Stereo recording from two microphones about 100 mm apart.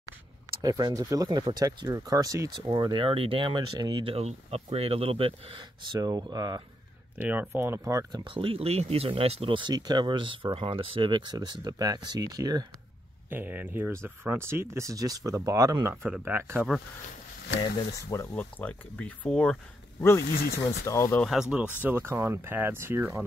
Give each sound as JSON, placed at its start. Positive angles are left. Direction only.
{"t": 0.6, "sound": "speech", "side_deg": -40}
{"t": 2.5, "sound": "speech", "side_deg": -45}
{"t": 5.9, "sound": "speech", "side_deg": -35}
{"t": 7.2, "sound": "speech", "side_deg": -15}
{"t": 8.2, "sound": "speech", "side_deg": -60}
{"t": 13.3, "sound": "speech", "side_deg": -20}
{"t": 16.1, "sound": "speech", "side_deg": -20}
{"t": 17.9, "sound": "speech", "side_deg": 30}
{"t": 18.3, "sound": "speech", "side_deg": 15}
{"t": 20.6, "sound": "speech", "side_deg": 30}
{"t": 21.3, "sound": "speech", "side_deg": -5}